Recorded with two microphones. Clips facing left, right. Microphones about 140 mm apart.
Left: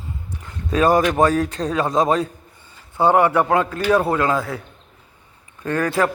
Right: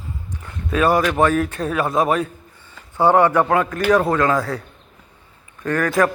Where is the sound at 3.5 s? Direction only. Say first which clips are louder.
Even; 30° left (ahead or behind).